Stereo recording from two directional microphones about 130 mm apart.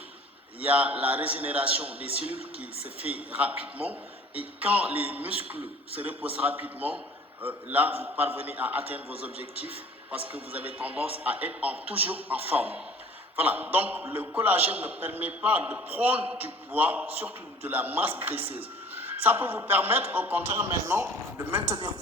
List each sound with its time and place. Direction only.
0.6 s a man's voice: 10° right (ahead or behind)
3.1 s a man's voice: 10° right (ahead or behind)
21.7 s speech: 40° right (ahead or behind)